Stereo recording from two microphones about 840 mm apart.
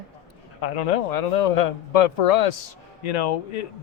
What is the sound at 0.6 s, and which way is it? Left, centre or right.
A man's voice, left.